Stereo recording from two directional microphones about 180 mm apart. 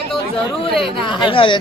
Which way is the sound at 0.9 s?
25° left (ahead or behind).